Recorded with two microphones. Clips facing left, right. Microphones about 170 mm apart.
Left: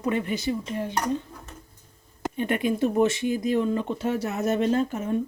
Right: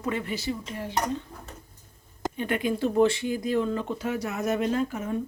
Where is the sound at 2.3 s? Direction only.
20° left (ahead or behind).